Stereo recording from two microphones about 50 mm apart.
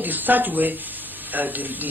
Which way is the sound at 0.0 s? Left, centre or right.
Right.